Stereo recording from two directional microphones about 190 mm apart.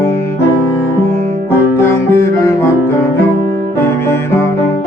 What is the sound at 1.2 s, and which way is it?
Music, 35° right (ahead or behind).